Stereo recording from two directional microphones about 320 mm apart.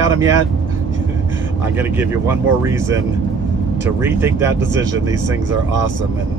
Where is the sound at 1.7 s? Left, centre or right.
Centre.